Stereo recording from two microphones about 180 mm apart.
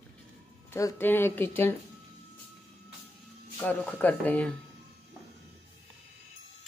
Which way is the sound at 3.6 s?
5° left (ahead or behind).